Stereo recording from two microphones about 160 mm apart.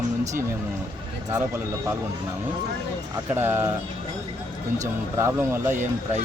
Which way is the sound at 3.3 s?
15° right (ahead or behind).